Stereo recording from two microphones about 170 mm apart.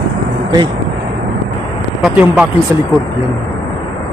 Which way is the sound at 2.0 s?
10° right (ahead or behind).